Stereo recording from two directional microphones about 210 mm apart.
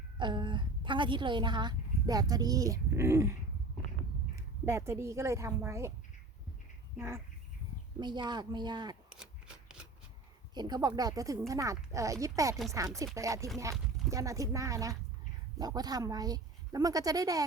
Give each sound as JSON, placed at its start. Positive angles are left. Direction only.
{"t": 0.2, "sound": "a woman's voice", "side_deg": -20}
{"t": 4.4, "sound": "a woman's voice", "side_deg": -15}
{"t": 6.9, "sound": "a woman's voice", "side_deg": -10}
{"t": 9.0, "sound": "shuffling cards", "side_deg": -5}
{"t": 10.5, "sound": "speech", "side_deg": -20}